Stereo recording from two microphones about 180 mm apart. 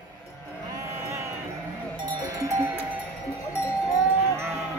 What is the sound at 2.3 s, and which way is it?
Sheep, 20° right (ahead or behind).